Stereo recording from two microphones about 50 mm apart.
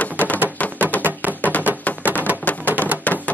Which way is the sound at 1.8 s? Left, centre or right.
Left.